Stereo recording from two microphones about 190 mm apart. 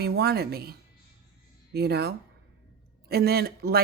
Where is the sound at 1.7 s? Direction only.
60° right (ahead or behind).